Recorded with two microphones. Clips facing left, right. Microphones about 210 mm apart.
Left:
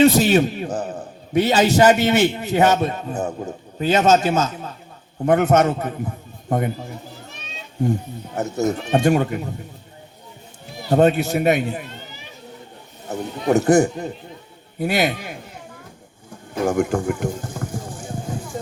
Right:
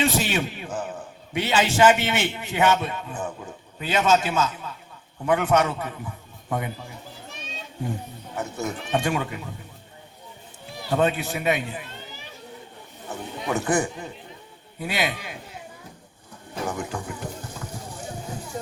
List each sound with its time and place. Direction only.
0.0 s a man's voice: 40° left (ahead or behind)
8.4 s speech: 40° left (ahead or behind)
10.8 s speech: 45° left (ahead or behind)
13.1 s a man's voice: 40° left (ahead or behind)
16.6 s speech: 45° left (ahead or behind)
17.2 s water: 45° left (ahead or behind)